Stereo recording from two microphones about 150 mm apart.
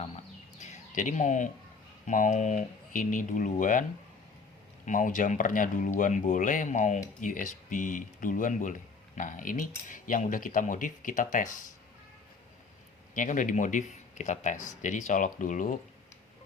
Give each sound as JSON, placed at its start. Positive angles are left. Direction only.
{"t": 0.6, "sound": "bird", "side_deg": 55}
{"t": 2.0, "sound": "speech", "side_deg": 55}
{"t": 4.9, "sound": "speech", "side_deg": 60}
{"t": 13.1, "sound": "speech", "side_deg": 60}